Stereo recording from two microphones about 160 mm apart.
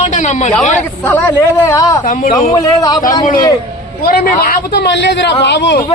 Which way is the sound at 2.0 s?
55° left (ahead or behind).